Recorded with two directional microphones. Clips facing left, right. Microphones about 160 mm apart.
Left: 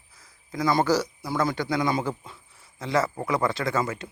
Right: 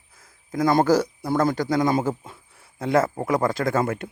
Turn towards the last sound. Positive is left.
turn(degrees=-55)  # may be behind; listen again after turning